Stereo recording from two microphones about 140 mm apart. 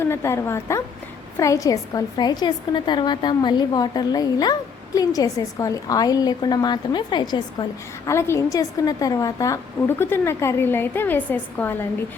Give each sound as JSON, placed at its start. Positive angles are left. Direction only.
{"t": 0.0, "sound": "a woman's voice", "side_deg": 20}
{"t": 8.0, "sound": "a woman's voice", "side_deg": 20}